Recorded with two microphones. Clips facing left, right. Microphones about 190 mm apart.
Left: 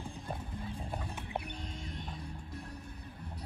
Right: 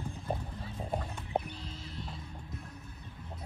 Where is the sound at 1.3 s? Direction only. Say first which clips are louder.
Right 7 dB; 35° right (ahead or behind).